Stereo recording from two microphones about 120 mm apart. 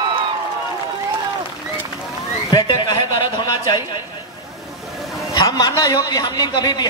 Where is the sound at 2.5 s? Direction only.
40° left (ahead or behind).